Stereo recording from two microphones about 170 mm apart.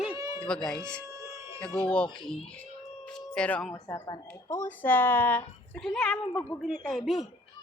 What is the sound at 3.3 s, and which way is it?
Speech, 5° left (ahead or behind).